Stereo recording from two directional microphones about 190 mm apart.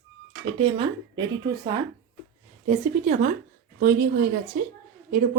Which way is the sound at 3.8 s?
50° right (ahead or behind).